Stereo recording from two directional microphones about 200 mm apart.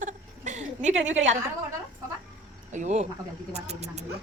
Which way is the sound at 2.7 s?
35° right (ahead or behind).